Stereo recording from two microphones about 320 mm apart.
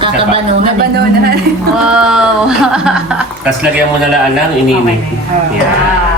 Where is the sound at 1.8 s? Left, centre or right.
Centre.